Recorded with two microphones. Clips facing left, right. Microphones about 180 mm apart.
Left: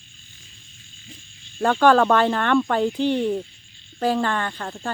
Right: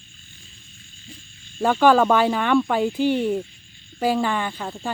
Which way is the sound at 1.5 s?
5° right (ahead or behind).